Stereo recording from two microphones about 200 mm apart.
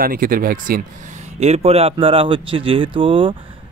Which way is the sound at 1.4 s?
30° right (ahead or behind).